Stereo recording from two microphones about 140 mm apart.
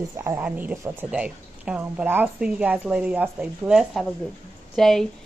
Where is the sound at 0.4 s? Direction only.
10° right (ahead or behind).